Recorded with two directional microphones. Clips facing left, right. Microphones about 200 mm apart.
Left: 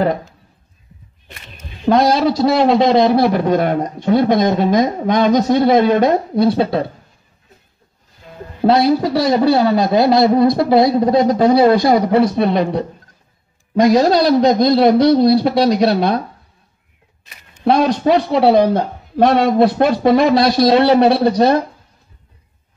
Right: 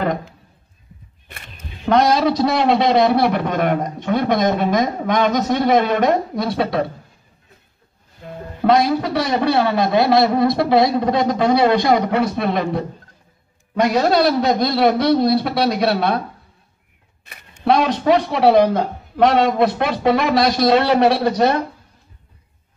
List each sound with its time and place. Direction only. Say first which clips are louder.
1.9 s speech: left 2 dB; 35° left (ahead or behind)
8.6 s speech: left 3 dB; 35° left (ahead or behind)
13.7 s speech: left 4 dB; 35° left (ahead or behind)
18.0 s speech: left 1 dB; 35° left (ahead or behind)